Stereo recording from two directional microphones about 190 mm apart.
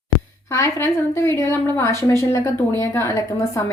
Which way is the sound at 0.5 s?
15° left (ahead or behind).